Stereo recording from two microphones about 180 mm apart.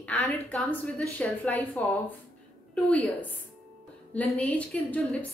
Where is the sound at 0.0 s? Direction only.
5° left (ahead or behind).